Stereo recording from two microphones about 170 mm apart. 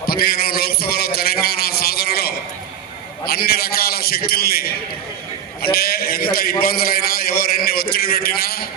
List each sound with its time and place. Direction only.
0.0 s a sound: 65° left (ahead or behind)
3.2 s a man's voice: 65° left (ahead or behind)
5.7 s a man's voice: 65° left (ahead or behind)